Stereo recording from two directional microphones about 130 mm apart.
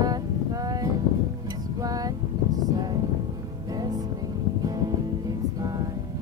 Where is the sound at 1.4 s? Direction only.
30° right (ahead or behind).